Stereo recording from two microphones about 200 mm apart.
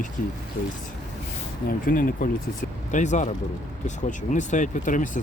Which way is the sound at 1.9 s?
40° left (ahead or behind).